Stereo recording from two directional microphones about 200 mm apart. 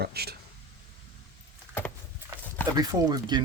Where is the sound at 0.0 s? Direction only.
50° right (ahead or behind).